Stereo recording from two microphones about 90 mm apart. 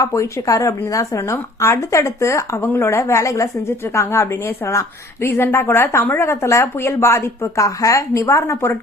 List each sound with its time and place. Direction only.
0.0 s a woman's voice: 35° left (ahead or behind)